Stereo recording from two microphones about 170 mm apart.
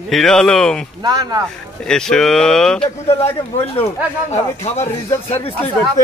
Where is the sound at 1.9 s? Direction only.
5° left (ahead or behind).